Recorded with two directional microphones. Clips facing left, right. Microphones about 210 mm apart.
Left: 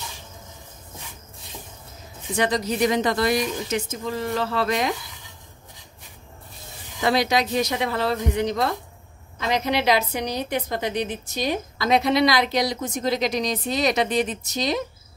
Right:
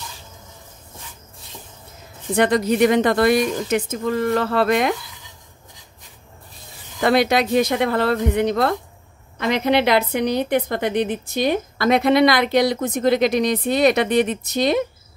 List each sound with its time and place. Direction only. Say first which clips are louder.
2.3 s a woman's voice: right 6 dB; 55° right (ahead or behind)
7.0 s a woman's voice: right 4 dB; 55° right (ahead or behind)